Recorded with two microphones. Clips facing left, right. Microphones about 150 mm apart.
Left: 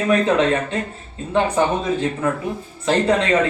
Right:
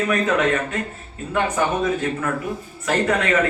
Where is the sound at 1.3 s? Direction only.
25° left (ahead or behind).